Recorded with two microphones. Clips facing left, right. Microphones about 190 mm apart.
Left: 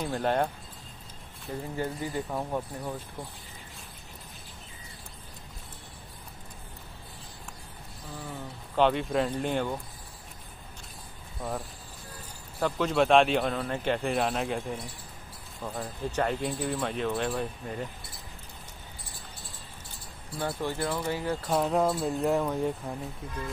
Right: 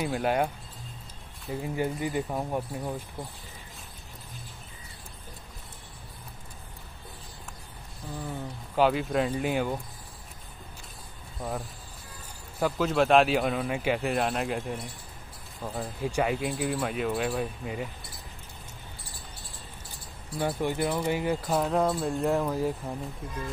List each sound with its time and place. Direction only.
0.0 s speech: 5° right (ahead or behind)
8.7 s speech: 5° right (ahead or behind)
12.5 s speech: 5° right (ahead or behind)
20.3 s speech: 15° right (ahead or behind)
21.5 s speech: centre (ahead or behind)